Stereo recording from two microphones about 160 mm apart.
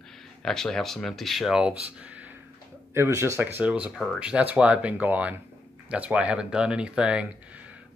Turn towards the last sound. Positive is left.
turn(degrees=-10)  # may be behind; listen again after turning